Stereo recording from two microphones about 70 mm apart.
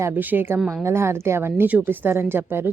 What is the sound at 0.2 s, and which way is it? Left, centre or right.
A woman's voice, right.